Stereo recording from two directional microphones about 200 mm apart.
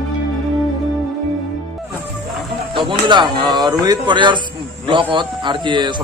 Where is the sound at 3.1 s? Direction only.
20° right (ahead or behind).